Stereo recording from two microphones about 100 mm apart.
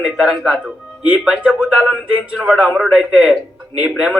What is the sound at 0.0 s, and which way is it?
A man's voice, 5° right (ahead or behind).